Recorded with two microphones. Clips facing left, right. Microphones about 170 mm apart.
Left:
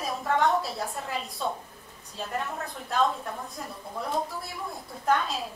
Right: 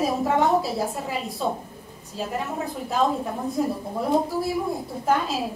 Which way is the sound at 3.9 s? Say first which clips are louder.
Right 3 dB; 25° right (ahead or behind).